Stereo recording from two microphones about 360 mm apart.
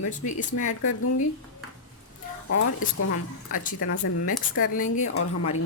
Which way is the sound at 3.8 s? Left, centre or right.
Left.